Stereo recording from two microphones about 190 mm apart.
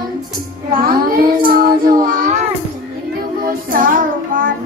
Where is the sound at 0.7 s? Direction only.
50° right (ahead or behind).